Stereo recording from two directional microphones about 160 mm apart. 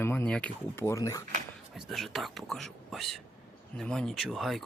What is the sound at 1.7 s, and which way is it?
Speech, centre (ahead or behind).